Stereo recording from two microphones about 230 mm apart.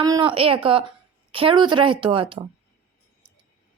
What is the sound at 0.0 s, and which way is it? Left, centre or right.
A woman's voice, centre.